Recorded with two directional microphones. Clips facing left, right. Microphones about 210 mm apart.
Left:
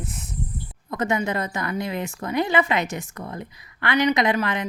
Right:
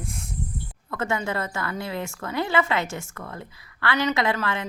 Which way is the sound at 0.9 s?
15° left (ahead or behind).